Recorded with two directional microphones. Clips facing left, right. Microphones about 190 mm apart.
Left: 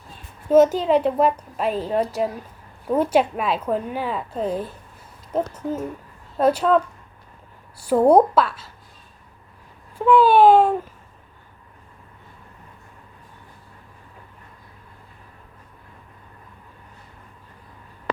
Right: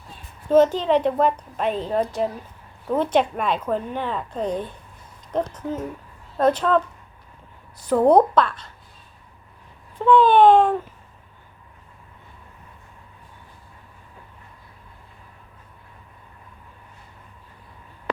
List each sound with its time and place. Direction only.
0.4 s a woman's voice: 10° left (ahead or behind)
10.0 s a woman's voice: 5° left (ahead or behind)